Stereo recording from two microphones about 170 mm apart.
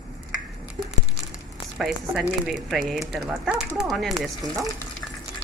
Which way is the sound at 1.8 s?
5° right (ahead or behind).